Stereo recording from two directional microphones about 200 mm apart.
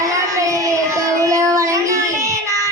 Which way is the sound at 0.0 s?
15° right (ahead or behind).